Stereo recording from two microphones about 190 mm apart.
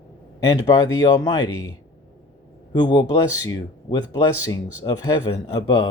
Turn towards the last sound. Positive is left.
turn(degrees=25)  # may be behind; listen again after turning